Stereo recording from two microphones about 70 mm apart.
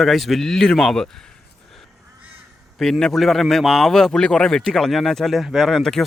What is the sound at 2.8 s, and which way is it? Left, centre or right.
A man's voice, centre.